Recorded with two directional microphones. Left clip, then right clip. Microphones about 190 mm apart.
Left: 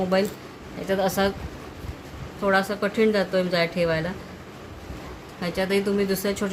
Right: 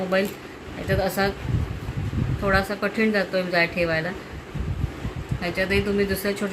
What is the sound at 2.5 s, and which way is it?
A woman's voice, 55° left (ahead or behind).